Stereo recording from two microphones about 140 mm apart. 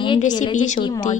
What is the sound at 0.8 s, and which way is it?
Speech, 35° left (ahead or behind).